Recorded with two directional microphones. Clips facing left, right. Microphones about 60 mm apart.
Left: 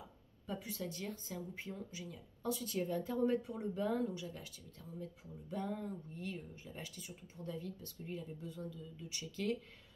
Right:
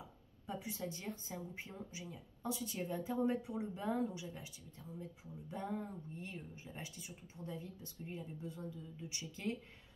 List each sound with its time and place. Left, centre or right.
0.5 s speech: right